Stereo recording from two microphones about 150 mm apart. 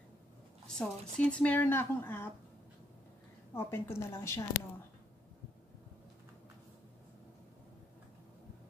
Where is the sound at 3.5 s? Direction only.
15° left (ahead or behind).